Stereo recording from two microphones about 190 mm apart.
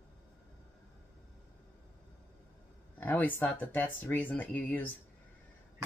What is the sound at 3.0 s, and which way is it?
Cutlery, 10° left (ahead or behind).